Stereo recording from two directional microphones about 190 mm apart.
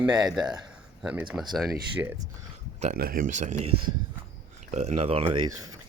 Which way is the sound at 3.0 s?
50° right (ahead or behind).